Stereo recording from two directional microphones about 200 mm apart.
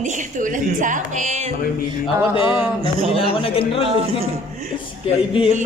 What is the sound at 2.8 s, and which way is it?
Speech, 25° right (ahead or behind).